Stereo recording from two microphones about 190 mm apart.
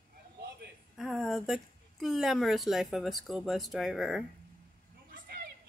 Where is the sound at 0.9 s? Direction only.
Centre (ahead or behind).